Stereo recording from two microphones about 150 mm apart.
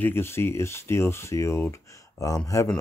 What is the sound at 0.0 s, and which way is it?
Speech, 15° left (ahead or behind).